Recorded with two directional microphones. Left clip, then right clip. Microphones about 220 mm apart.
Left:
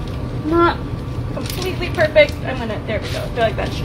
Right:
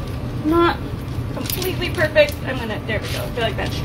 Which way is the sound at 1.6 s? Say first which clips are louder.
Left 3 dB; 20° right (ahead or behind).